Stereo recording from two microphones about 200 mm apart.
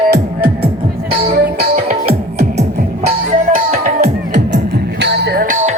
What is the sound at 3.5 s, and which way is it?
Music, 45° right (ahead or behind).